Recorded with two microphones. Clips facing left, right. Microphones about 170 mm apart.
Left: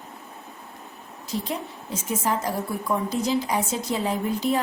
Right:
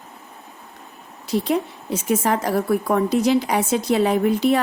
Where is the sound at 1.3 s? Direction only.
70° right (ahead or behind).